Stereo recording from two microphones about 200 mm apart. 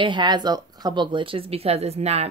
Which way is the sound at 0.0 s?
25° right (ahead or behind).